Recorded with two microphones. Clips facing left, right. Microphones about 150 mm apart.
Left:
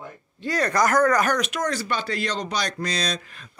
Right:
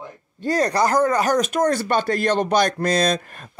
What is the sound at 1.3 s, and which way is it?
Speech, 45° right (ahead or behind).